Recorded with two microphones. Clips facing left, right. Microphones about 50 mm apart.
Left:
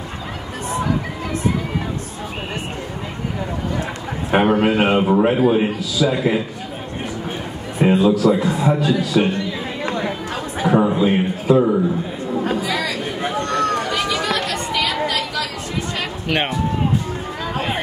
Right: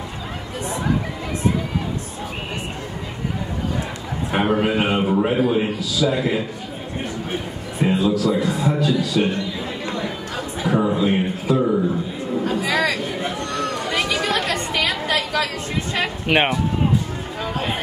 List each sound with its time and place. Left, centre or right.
4.3 s a man's voice: left
4.9 s a man's voice: centre
7.8 s a man's voice: left
10.7 s a man's voice: centre
12.6 s chatter: right
13.5 s chatter: left
14.2 s chatter: right
16.3 s speech: centre